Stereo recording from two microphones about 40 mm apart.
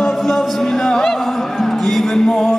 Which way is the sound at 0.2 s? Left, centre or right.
Centre.